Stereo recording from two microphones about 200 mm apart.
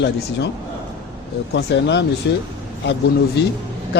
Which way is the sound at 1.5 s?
60° left (ahead or behind).